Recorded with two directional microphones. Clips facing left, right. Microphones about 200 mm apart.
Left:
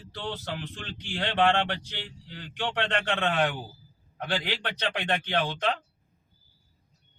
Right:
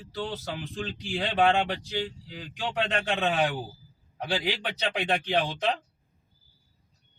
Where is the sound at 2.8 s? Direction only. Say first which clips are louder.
Right 1 dB; 5° right (ahead or behind).